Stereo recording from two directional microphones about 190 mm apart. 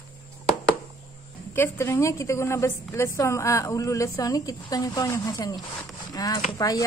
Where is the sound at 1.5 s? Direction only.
15° left (ahead or behind).